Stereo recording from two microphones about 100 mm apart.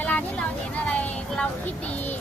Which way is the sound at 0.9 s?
10° left (ahead or behind).